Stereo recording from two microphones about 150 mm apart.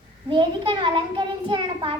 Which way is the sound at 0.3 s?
35° right (ahead or behind).